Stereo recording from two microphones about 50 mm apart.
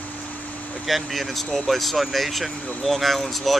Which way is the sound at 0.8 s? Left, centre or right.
Centre.